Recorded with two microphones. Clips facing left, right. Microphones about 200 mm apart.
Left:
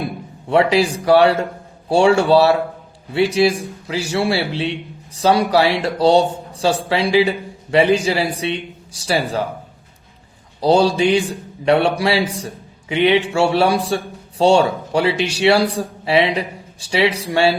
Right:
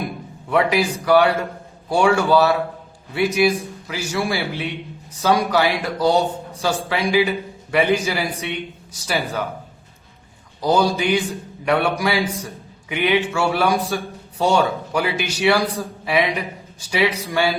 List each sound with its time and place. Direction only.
0.4 s a man's voice: 30° left (ahead or behind)
10.6 s a man's voice: 30° left (ahead or behind)